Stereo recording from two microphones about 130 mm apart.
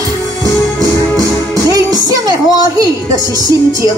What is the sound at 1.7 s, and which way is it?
Music, 30° right (ahead or behind).